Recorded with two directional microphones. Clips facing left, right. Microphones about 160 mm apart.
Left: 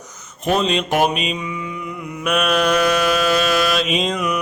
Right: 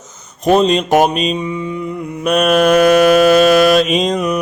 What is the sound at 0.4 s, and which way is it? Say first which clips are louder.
Mantra: right 7 dB; 40° right (ahead or behind).